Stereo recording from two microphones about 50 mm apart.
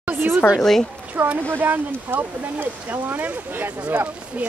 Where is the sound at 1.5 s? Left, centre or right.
Right.